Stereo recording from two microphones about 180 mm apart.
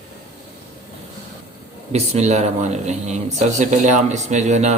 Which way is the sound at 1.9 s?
40° right (ahead or behind).